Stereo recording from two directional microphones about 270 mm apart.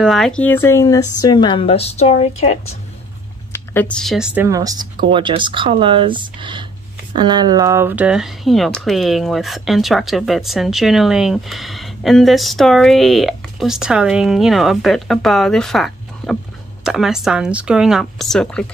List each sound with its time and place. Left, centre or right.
0.0 s a woman's voice: centre; by 2.5 s left
3.5 s speech: centre